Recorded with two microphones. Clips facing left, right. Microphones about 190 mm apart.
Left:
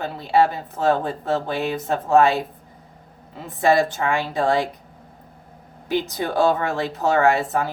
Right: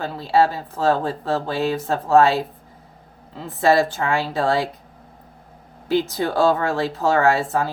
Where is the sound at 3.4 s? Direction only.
15° left (ahead or behind).